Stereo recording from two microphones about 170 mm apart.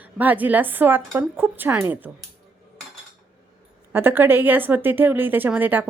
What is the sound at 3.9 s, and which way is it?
Speech, 10° right (ahead or behind).